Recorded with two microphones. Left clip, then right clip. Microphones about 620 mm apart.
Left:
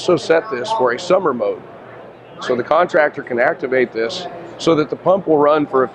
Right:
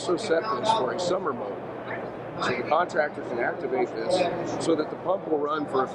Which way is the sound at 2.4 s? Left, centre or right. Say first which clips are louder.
Left 9 dB; left.